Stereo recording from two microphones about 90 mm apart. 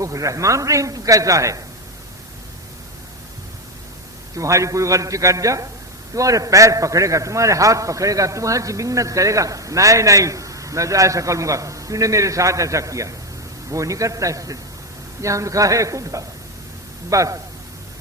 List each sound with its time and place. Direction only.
0.0 s a man's voice: 40° right (ahead or behind)
4.4 s a man's voice: 35° right (ahead or behind)